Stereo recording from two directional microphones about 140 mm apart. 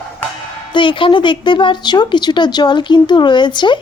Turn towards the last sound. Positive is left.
turn(degrees=35)  # may be behind; listen again after turning